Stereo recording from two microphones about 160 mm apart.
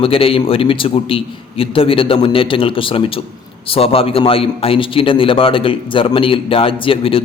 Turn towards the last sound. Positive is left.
turn(degrees=35)  # may be behind; listen again after turning